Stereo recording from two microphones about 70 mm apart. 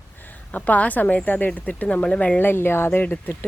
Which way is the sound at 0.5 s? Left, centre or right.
Left.